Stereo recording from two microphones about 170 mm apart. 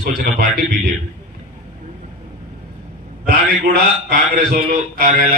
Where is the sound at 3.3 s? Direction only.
60° right (ahead or behind).